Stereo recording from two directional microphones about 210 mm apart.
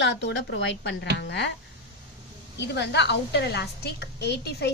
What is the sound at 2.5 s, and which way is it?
Speech, 55° left (ahead or behind).